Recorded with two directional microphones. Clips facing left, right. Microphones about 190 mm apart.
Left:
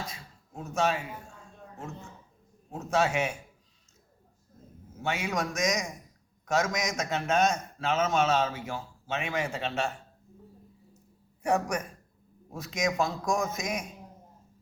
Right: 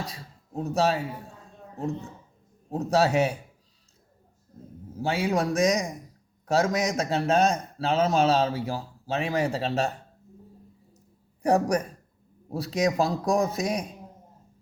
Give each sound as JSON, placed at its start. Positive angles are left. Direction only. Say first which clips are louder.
{"t": 0.0, "sound": "speech", "louder": "right 4 dB", "side_deg": -35}
{"t": 2.6, "sound": "a man's voice", "louder": "right 4 dB", "side_deg": -35}
{"t": 4.9, "sound": "a man's voice", "louder": "right 6 dB", "side_deg": -35}
{"t": 11.4, "sound": "a man's voice", "louder": "right 5 dB", "side_deg": -35}